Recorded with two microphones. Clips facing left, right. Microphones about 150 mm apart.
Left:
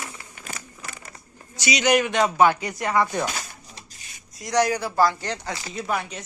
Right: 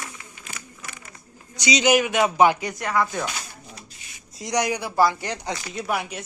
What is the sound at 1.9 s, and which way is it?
Speech, 5° right (ahead or behind).